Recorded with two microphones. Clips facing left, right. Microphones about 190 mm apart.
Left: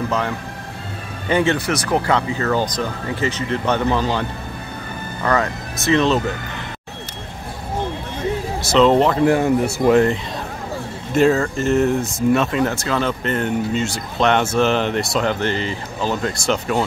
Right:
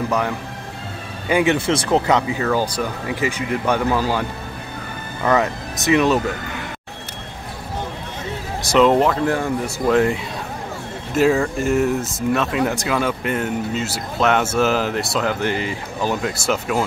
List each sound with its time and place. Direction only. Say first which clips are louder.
0.1 s speech: right 1 dB; 10° right (ahead or behind)
8.6 s speech: left 1 dB; 10° right (ahead or behind)
9.2 s speech: left 5 dB; 15° left (ahead or behind)
11.1 s speech: left 1 dB; 10° right (ahead or behind)
12.6 s speech: even; 15° right (ahead or behind)